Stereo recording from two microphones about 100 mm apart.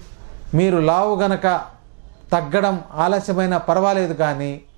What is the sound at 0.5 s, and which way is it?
Speech, 15° right (ahead or behind).